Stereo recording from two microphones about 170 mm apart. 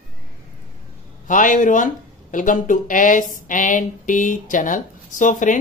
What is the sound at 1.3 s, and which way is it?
Speech, 50° left (ahead or behind).